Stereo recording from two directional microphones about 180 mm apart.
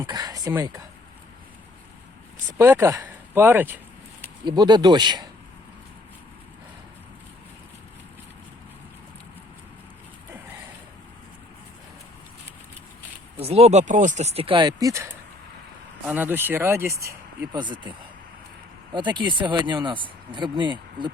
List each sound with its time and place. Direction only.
0.0 s speech: 20° right (ahead or behind)
2.6 s speech: 15° right (ahead or behind)
4.4 s speech: 25° right (ahead or behind)
13.4 s speech: 35° right (ahead or behind); by 17.2 s 15° right (ahead or behind)
17.5 s speech: 25° right (ahead or behind)
18.9 s speech: 25° right (ahead or behind)